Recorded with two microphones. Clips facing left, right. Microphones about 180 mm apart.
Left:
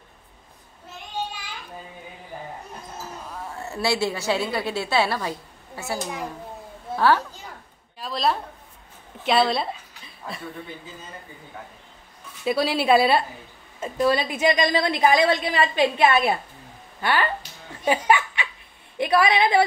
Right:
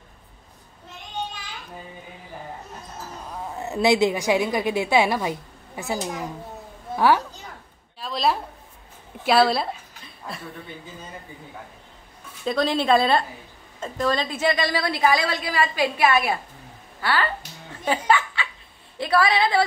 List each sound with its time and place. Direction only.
3.4 s a woman's voice: 20° right (ahead or behind)
7.0 s a child's voice: 15° right (ahead or behind)
8.0 s a sound: centre (ahead or behind)
9.2 s speech: 5° right (ahead or behind)
12.4 s a woman's voice: 10° left (ahead or behind)